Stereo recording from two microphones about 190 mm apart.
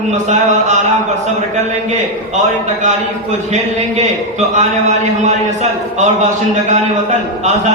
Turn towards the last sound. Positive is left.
turn(degrees=-40)  # may be behind; listen again after turning